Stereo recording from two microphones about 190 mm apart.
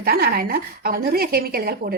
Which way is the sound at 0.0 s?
55° right (ahead or behind).